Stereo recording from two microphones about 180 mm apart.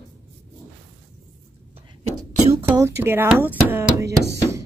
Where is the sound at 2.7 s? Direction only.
15° right (ahead or behind).